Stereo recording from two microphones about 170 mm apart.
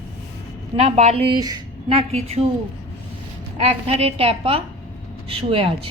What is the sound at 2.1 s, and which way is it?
Speech, 40° right (ahead or behind).